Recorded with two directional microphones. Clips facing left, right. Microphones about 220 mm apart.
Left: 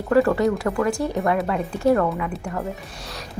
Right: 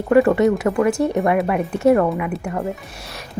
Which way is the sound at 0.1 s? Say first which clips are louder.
Right 4 dB; 20° right (ahead or behind).